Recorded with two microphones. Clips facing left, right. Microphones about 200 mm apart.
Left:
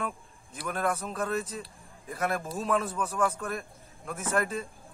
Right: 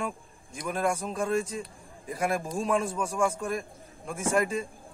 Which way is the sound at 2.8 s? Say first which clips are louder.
Right 2 dB; 25° right (ahead or behind).